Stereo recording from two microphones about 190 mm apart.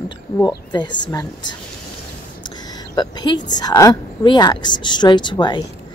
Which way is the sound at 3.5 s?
20° left (ahead or behind).